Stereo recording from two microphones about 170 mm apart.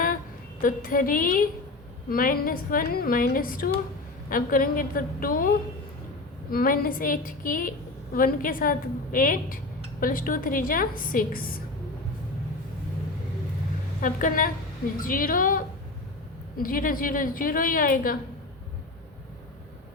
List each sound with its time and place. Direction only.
0.6 s a woman's voice: 55° left (ahead or behind)
14.0 s a woman's voice: 55° left (ahead or behind)